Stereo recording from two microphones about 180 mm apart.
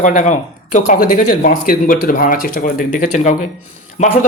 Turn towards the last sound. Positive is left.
turn(degrees=40)  # may be behind; listen again after turning